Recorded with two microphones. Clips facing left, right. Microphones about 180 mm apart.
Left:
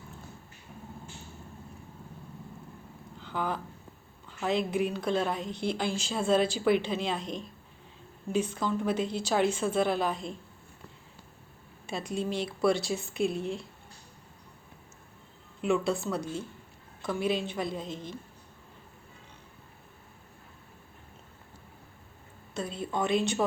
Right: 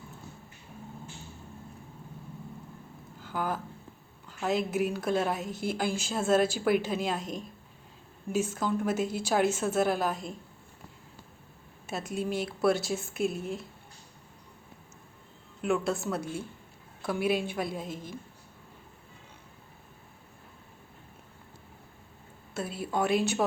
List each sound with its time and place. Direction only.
3.2 s a sound: 5° right (ahead or behind)
4.3 s a woman's voice: centre (ahead or behind)
7.2 s a woman's voice: 45° right (ahead or behind)
8.3 s a woman's voice: 5° right (ahead or behind)
11.9 s a woman's voice: 5° right (ahead or behind)
15.6 s a woman's voice: centre (ahead or behind)
22.5 s a woman's voice: 5° right (ahead or behind)